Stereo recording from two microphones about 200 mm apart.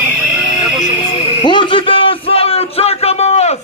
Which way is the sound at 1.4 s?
25° left (ahead or behind).